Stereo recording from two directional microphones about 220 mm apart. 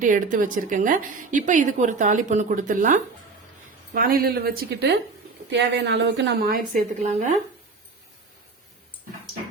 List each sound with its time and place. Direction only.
0.0 s a woman's voice: 35° right (ahead or behind)